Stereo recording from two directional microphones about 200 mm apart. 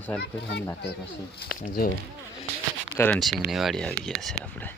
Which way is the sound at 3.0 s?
5° left (ahead or behind).